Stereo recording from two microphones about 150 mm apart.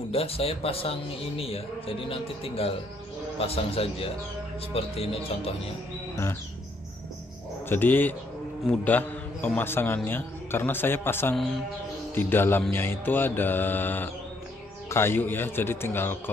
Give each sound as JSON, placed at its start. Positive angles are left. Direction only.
{"t": 0.1, "sound": "a man's voice", "side_deg": 40}
{"t": 7.6, "sound": "a man's voice", "side_deg": 15}